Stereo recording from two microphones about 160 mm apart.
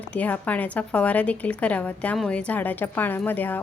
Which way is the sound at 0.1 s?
10° left (ahead or behind).